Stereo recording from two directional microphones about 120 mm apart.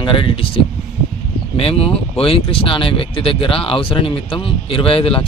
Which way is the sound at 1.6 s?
55° left (ahead or behind).